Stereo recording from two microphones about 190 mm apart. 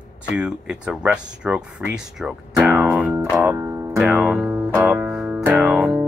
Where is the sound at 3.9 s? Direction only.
Centre (ahead or behind).